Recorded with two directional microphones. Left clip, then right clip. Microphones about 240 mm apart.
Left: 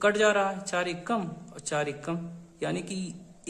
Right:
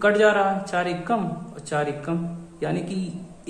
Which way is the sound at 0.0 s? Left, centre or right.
Left.